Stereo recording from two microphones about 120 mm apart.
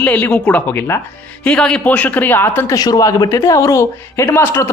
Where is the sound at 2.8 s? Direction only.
30° left (ahead or behind).